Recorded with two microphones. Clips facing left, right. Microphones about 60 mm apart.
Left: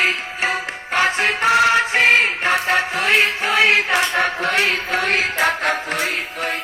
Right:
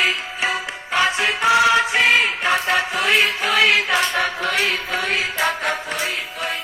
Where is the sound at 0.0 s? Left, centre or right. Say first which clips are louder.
Left 1 dB; left.